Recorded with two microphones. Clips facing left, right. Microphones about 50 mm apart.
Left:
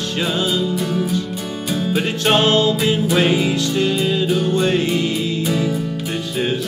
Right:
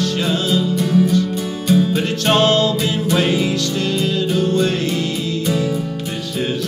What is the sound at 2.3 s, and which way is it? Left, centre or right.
Music, centre.